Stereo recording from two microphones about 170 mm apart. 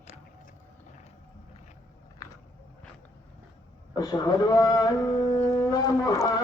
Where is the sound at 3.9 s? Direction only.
20° left (ahead or behind).